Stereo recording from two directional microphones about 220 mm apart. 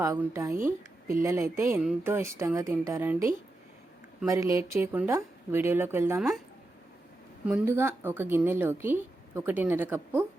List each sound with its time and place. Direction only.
0.0 s speech: 15° right (ahead or behind)
4.3 s speech: 15° right (ahead or behind)
7.4 s speech: 10° right (ahead or behind)